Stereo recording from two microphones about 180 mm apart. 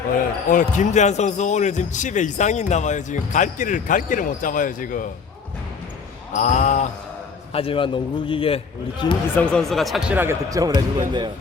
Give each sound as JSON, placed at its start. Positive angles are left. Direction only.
{"t": 0.5, "sound": "a man's voice", "side_deg": 40}
{"t": 6.3, "sound": "a man's voice", "side_deg": 40}
{"t": 7.5, "sound": "a man's voice", "side_deg": 30}
{"t": 9.4, "sound": "speech", "side_deg": 5}
{"t": 10.2, "sound": "speech", "side_deg": -15}